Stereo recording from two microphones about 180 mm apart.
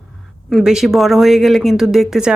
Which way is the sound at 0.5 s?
Centre (ahead or behind).